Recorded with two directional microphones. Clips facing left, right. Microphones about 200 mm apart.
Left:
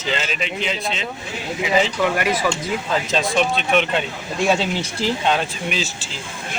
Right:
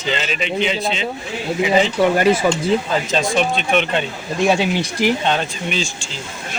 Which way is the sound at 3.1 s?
Centre (ahead or behind).